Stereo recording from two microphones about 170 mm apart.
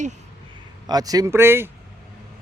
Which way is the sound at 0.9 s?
20° right (ahead or behind).